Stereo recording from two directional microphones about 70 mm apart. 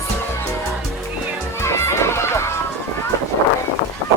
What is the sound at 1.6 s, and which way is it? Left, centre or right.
Music, left.